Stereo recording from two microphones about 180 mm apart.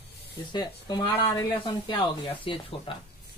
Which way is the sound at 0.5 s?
25° left (ahead or behind).